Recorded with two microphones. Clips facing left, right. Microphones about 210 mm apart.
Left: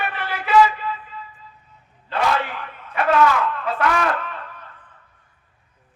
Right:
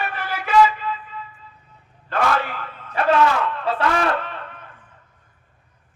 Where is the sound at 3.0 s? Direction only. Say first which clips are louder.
Even; 35° right (ahead or behind).